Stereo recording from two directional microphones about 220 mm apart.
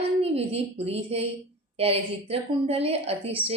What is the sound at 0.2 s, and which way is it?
A woman's voice, 25° right (ahead or behind).